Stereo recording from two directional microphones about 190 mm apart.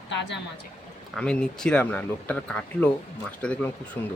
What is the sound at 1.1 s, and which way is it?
Speech, 5° left (ahead or behind).